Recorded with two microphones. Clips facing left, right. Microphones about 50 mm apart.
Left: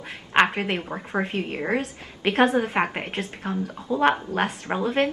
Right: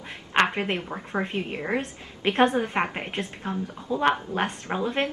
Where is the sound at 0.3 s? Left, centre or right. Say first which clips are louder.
Left 3 dB; left.